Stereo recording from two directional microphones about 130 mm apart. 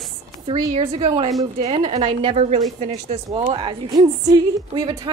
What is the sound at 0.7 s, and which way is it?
Speech, 45° right (ahead or behind).